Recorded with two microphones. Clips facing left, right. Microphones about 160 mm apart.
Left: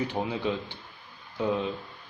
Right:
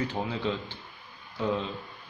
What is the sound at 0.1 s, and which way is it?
Speech, 15° left (ahead or behind).